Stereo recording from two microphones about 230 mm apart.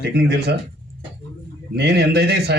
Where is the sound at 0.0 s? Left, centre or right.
Right.